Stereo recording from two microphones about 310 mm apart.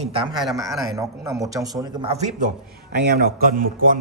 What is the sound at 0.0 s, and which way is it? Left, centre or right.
A man's voice, centre.